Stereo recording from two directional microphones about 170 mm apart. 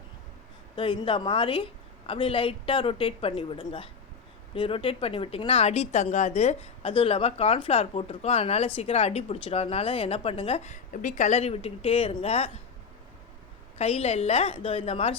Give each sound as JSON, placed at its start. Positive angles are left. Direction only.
{"t": 0.8, "sound": "speech", "side_deg": 30}
{"t": 13.7, "sound": "speech", "side_deg": 35}